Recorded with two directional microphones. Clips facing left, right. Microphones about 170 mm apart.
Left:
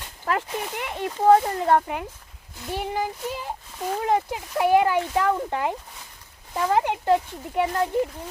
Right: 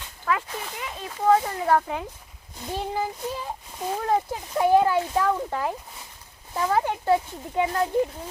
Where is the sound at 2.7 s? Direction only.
10° left (ahead or behind).